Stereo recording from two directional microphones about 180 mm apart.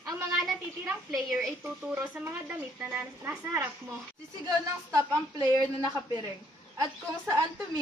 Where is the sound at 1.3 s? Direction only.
5° right (ahead or behind); by 6.2 s 20° right (ahead or behind).